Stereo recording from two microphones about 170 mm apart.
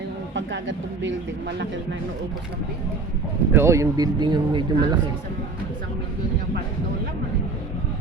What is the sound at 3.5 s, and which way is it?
Speech, 15° right (ahead or behind).